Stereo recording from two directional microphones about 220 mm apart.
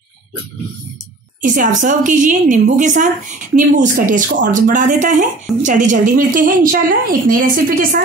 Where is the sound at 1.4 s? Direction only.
35° right (ahead or behind).